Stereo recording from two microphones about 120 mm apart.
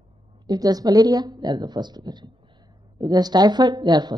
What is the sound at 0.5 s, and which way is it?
Speech, 30° right (ahead or behind).